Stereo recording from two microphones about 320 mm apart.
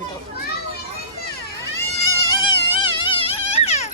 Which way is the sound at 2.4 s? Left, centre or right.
Centre.